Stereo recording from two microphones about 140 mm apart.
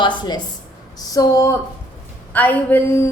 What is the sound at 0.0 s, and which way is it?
A woman's voice, 30° left (ahead or behind).